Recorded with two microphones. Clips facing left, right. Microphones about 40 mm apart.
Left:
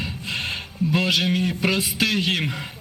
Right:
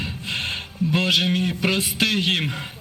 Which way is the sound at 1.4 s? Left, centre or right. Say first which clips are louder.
Even; right.